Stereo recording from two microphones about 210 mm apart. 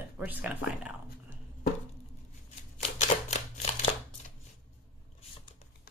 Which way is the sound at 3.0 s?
30° left (ahead or behind).